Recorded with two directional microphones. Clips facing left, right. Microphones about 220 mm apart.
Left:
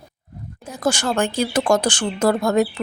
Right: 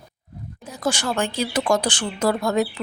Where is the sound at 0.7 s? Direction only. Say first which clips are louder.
Left 3 dB; 45° left (ahead or behind).